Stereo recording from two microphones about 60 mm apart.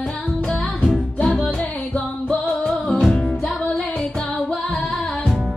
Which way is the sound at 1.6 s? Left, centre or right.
Left.